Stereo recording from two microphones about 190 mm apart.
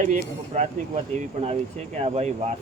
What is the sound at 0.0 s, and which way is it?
Speech, 40° right (ahead or behind).